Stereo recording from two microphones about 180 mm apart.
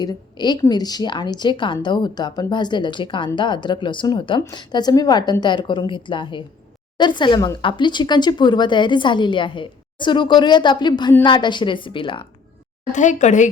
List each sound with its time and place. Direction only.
0.0 s speech: 25° left (ahead or behind)
12.9 s a woman's voice: 45° left (ahead or behind)